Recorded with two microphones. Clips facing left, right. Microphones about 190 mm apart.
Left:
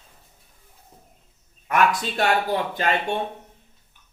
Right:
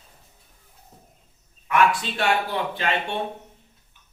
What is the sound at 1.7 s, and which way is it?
Speech, 40° left (ahead or behind).